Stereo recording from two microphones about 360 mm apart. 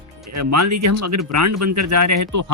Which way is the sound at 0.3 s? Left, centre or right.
Right.